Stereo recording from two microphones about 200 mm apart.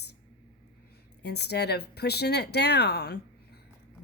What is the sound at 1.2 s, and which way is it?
A woman's voice, 55° left (ahead or behind).